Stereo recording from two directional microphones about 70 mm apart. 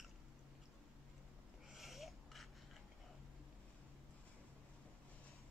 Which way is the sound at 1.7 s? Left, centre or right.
Centre.